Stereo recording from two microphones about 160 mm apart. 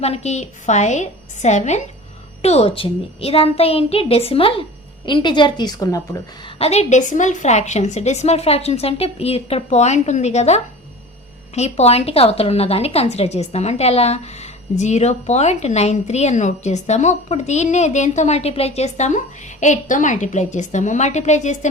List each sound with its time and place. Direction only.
0.0 s a woman's voice: 40° left (ahead or behind); by 6.0 s 25° left (ahead or behind)
6.4 s a woman's voice: 40° left (ahead or behind)